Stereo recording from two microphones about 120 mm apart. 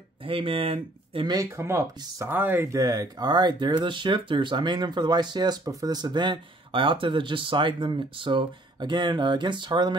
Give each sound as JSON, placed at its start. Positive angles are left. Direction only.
{"t": 0.2, "sound": "speech", "side_deg": -50}
{"t": 1.2, "sound": "speech", "side_deg": -35}
{"t": 1.6, "sound": "speech", "side_deg": -20}
{"t": 2.8, "sound": "speech", "side_deg": -30}